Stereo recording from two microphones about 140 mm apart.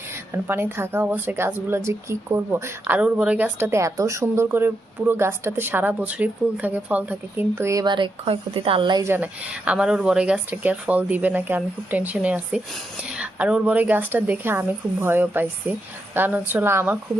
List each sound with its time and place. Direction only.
0.4 s speech: 15° right (ahead or behind); by 9.0 s 35° right (ahead or behind)
9.0 s speech: 15° right (ahead or behind)